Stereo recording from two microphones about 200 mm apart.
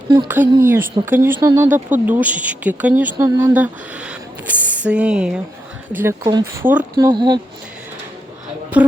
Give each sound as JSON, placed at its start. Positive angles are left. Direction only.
{"t": 0.3, "sound": "speech", "side_deg": -10}
{"t": 6.9, "sound": "speech", "side_deg": -20}